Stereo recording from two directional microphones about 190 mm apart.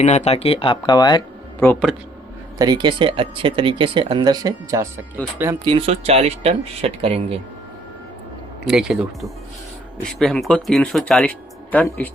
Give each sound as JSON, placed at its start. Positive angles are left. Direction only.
{"t": 0.0, "sound": "speech", "side_deg": 35}
{"t": 1.5, "sound": "speech", "side_deg": 10}
{"t": 2.6, "sound": "speech", "side_deg": -25}
{"t": 5.2, "sound": "speech", "side_deg": 10}
{"t": 5.6, "sound": "speech", "side_deg": -30}
{"t": 8.6, "sound": "speech", "side_deg": -5}